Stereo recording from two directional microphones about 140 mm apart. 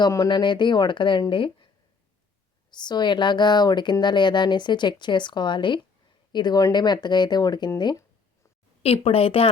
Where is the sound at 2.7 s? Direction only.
30° left (ahead or behind).